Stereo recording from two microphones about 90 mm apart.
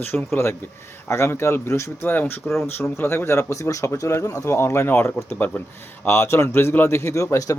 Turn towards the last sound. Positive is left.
turn(degrees=35)  # may be behind; listen again after turning